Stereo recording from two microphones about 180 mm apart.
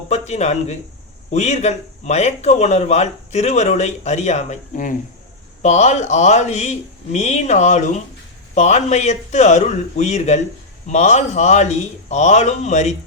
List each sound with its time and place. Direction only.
0.1 s speech: 40° left (ahead or behind)